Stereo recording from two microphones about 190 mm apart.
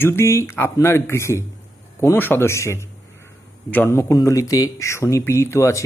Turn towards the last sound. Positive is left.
turn(degrees=15)  # may be behind; listen again after turning